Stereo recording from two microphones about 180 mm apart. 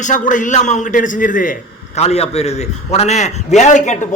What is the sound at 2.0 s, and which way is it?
A man's voice, 35° left (ahead or behind).